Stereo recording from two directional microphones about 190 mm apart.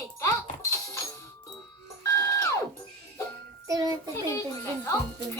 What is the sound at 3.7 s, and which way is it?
Speech, 20° right (ahead or behind).